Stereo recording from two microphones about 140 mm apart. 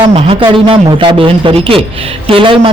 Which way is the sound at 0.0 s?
40° right (ahead or behind).